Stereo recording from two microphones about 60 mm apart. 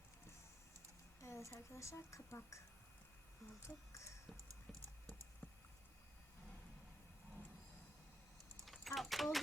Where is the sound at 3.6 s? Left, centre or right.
Left.